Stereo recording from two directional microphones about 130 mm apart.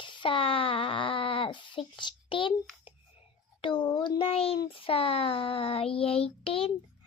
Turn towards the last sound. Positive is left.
turn(degrees=45)  # may be behind; listen again after turning